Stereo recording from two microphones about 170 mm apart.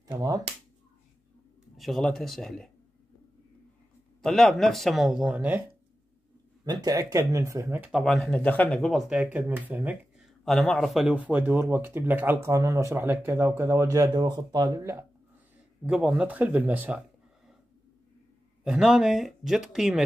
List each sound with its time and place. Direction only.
0.1 s speech: 20° right (ahead or behind)
1.8 s a man's voice: centre (ahead or behind)
4.2 s a man's voice: centre (ahead or behind)
6.6 s speech: 20° right (ahead or behind)
18.6 s a man's voice: 5° right (ahead or behind)